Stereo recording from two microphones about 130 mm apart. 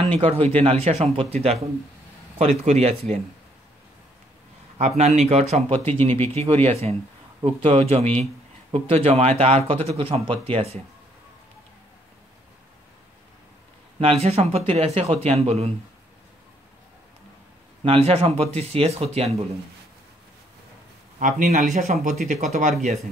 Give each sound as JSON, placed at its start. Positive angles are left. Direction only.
{"t": 0.1, "sound": "speech", "side_deg": -50}
{"t": 4.7, "sound": "speech", "side_deg": -60}
{"t": 13.9, "sound": "speech", "side_deg": -50}
{"t": 17.8, "sound": "speech", "side_deg": -50}
{"t": 21.2, "sound": "speech", "side_deg": -85}